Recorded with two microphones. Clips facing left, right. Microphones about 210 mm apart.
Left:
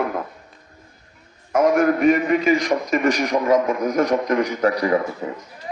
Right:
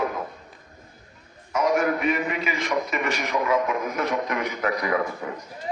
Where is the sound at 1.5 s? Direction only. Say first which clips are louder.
Left 6 dB; 50° left (ahead or behind); by 5.3 s 30° left (ahead or behind).